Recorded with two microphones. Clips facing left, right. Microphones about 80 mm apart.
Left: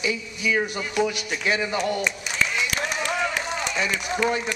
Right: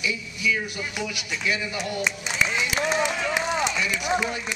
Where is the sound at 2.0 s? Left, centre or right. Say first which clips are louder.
Even; centre.